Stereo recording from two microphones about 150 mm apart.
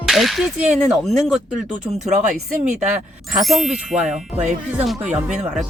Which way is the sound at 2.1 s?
60° right (ahead or behind).